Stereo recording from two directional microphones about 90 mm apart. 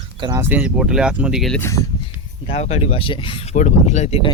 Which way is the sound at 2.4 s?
90° left.